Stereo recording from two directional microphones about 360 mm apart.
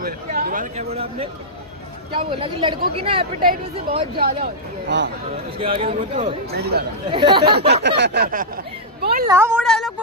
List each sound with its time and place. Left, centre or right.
0.0 s speech: right
5.6 s speech: centre
7.1 s speech: centre
7.5 s speech: right
9.3 s a woman's voice: centre